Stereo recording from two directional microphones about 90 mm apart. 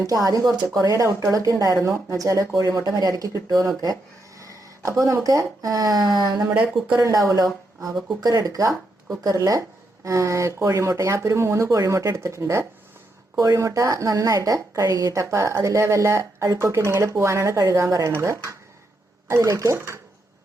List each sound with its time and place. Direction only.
0.0 s a woman's voice: 40° right (ahead or behind)
6.5 s speech: 15° right (ahead or behind)
7.0 s a woman's voice: 40° right (ahead or behind)